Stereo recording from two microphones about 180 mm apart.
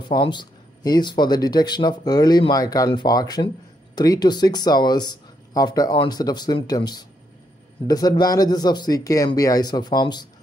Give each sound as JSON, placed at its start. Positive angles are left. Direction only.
{"t": 0.1, "sound": "speech", "side_deg": 25}